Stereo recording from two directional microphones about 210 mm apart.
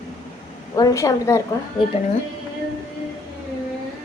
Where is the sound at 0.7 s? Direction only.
15° left (ahead or behind).